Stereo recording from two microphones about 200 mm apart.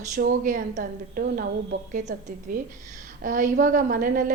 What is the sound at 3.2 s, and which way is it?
A woman's voice, 40° right (ahead or behind).